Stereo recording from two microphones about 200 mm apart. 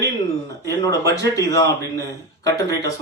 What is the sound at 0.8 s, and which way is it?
A man's voice, 20° left (ahead or behind).